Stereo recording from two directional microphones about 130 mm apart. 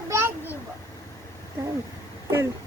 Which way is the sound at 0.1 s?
15° right (ahead or behind).